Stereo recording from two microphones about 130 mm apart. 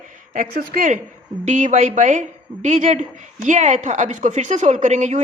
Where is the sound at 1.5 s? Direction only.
70° right (ahead or behind).